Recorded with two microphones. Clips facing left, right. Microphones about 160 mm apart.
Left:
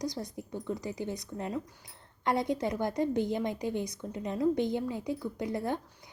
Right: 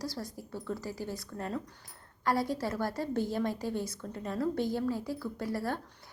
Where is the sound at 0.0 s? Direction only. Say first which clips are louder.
Left 3 dB; 20° left (ahead or behind).